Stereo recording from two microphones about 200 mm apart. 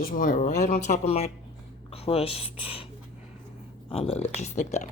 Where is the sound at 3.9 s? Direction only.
30° left (ahead or behind).